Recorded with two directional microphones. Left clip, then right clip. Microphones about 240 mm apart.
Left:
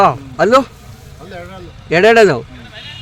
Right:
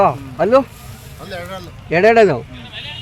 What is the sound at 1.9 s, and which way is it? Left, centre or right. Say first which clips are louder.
Speech: left 2 dB; centre.